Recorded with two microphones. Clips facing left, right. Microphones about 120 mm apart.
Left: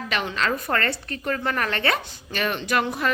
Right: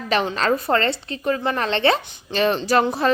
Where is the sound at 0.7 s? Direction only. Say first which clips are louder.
Right 5 dB; 25° right (ahead or behind).